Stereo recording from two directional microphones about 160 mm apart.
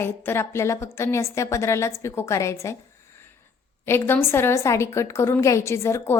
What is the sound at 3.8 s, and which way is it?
A woman's voice, 15° left (ahead or behind).